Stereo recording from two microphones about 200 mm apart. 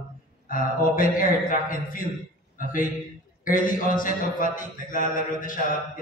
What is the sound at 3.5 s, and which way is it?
A man's voice, 45° left (ahead or behind).